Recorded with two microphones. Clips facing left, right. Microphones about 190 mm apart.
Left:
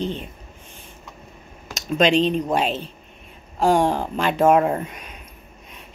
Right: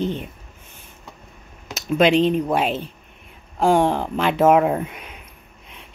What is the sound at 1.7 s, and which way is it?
Speech, 10° right (ahead or behind).